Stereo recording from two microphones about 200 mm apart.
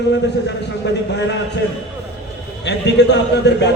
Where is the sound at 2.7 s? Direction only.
60° left (ahead or behind).